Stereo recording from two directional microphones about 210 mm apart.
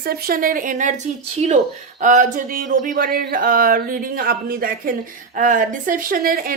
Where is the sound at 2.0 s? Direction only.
40° right (ahead or behind).